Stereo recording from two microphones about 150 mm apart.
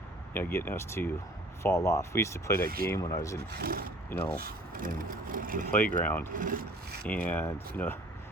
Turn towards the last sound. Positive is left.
turn(degrees=15)  # may be behind; listen again after turning